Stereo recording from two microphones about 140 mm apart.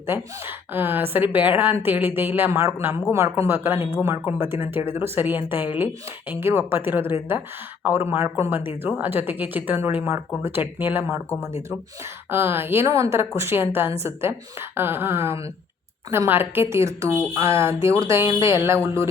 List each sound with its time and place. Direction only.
0.1 s a woman's voice: 15° right (ahead or behind)
12.3 s a woman's voice: 15° right (ahead or behind)